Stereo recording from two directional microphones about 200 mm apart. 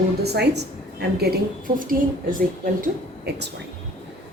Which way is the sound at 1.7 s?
45° right (ahead or behind).